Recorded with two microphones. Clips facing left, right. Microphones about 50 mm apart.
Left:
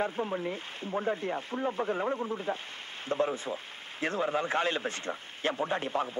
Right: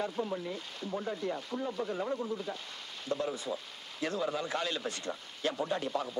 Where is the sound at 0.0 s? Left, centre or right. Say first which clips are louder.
Left 3 dB; left.